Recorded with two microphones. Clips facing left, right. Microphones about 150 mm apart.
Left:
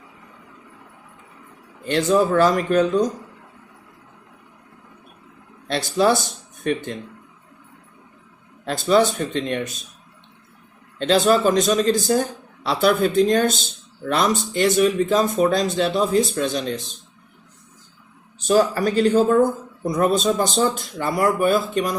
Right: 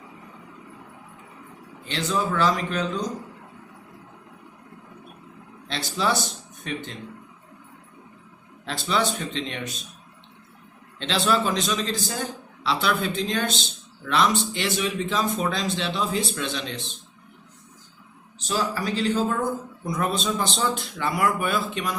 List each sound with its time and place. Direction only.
1.9 s speech: 50° left (ahead or behind)
5.6 s speech: 50° left (ahead or behind)
8.6 s speech: 45° left (ahead or behind)
11.0 s speech: 45° left (ahead or behind)
18.4 s a man's voice: 55° left (ahead or behind)